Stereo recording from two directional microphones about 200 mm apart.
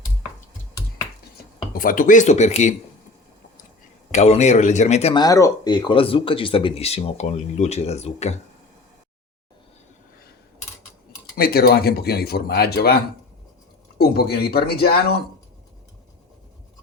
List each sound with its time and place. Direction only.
1.7 s a man's voice: 45° left (ahead or behind)
4.1 s a man's voice: 35° left (ahead or behind)
5.2 s speech: 20° left (ahead or behind); by 8.4 s 35° left (ahead or behind)
11.3 s speech: 50° left (ahead or behind)
14.0 s speech: 50° left (ahead or behind)